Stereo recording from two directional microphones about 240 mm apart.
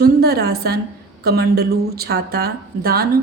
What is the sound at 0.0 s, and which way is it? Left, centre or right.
A woman's voice, right.